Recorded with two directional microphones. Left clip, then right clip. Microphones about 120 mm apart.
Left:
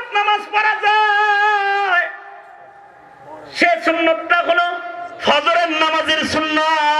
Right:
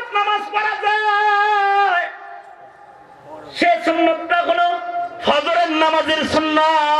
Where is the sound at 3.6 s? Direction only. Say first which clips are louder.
Even; 30° left (ahead or behind).